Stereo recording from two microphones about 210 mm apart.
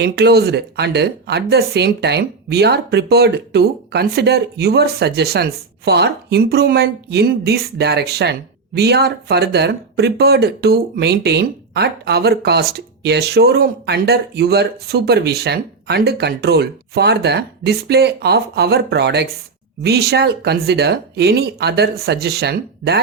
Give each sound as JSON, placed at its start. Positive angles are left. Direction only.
{"t": 0.0, "sound": "a woman's voice", "side_deg": -50}